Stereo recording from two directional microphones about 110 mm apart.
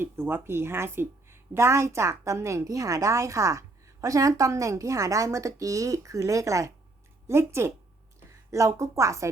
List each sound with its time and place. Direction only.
0.0 s a woman's voice: 20° right (ahead or behind)